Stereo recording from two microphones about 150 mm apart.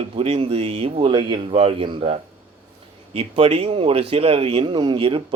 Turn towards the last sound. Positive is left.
turn(degrees=-35)  # may be behind; listen again after turning